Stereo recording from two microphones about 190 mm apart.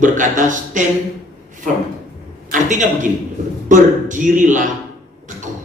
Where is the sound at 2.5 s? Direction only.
40° right (ahead or behind).